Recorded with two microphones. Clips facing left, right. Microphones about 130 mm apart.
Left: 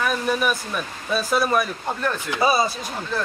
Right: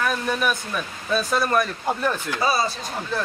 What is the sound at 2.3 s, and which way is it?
Speech, 20° left (ahead or behind).